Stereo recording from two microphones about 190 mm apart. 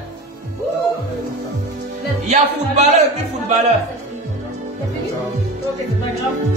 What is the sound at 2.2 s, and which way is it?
Music, 35° right (ahead or behind).